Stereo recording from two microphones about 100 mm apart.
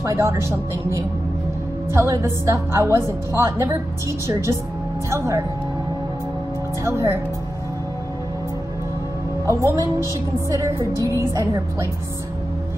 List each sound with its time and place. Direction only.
0.0 s a woman's voice: 30° right (ahead or behind)
6.8 s a woman's voice: 25° right (ahead or behind)
9.5 s a woman's voice: 30° right (ahead or behind)